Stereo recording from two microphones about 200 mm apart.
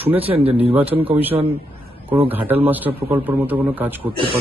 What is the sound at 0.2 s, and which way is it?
Speech, 30° right (ahead or behind).